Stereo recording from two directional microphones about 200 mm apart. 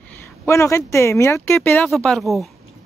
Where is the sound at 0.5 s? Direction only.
15° left (ahead or behind).